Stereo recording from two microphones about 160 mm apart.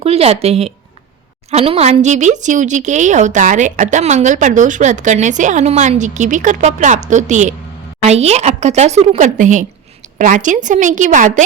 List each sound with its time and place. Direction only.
0.0 s a woman's voice: 40° right (ahead or behind)